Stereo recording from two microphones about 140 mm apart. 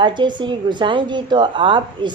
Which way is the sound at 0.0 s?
35° right (ahead or behind).